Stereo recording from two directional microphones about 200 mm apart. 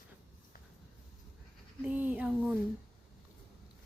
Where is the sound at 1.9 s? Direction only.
10° right (ahead or behind).